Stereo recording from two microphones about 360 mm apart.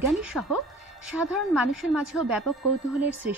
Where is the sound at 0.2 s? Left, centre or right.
Centre.